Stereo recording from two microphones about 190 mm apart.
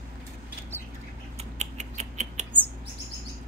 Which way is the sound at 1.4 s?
35° right (ahead or behind).